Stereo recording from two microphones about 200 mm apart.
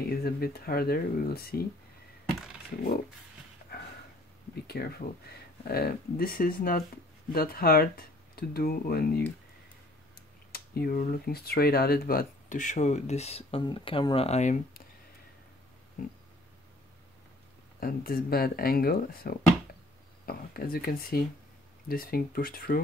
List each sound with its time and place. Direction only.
0.0 s speech: 50° left (ahead or behind)
3.7 s a sound: 50° left (ahead or behind)
4.6 s speech: 50° left (ahead or behind)
10.5 s speech: 50° left (ahead or behind); by 14.6 s 35° left (ahead or behind)
17.7 s speech: 45° left (ahead or behind)